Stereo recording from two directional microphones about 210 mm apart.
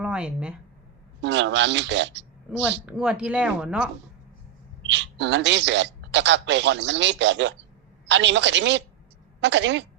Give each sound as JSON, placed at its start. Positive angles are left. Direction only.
{"t": 0.0, "sound": "speech", "side_deg": -5}
{"t": 1.2, "sound": "speech", "side_deg": -60}
{"t": 2.5, "sound": "speech", "side_deg": -5}
{"t": 4.8, "sound": "speech", "side_deg": -60}